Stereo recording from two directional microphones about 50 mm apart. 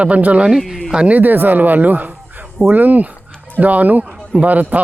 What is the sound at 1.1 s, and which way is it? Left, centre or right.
Speech, right.